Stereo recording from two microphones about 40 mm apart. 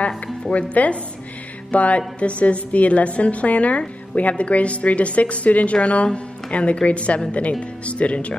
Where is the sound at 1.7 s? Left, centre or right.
Left.